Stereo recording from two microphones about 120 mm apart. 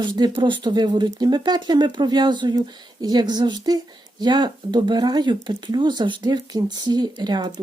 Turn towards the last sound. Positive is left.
turn(degrees=-35)  # may be behind; listen again after turning